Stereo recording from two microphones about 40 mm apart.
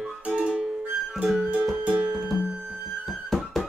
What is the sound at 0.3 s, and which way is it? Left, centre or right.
Music, right.